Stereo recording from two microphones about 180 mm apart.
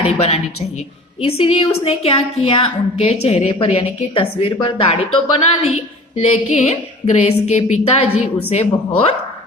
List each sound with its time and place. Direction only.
0.0 s a woman's voice: 35° left (ahead or behind)